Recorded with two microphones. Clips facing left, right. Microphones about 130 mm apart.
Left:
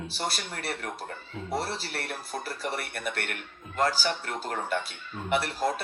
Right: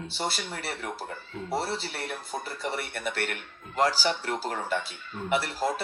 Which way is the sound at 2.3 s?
Centre (ahead or behind).